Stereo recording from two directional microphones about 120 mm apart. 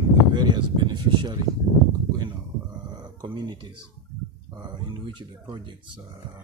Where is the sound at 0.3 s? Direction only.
40° right (ahead or behind).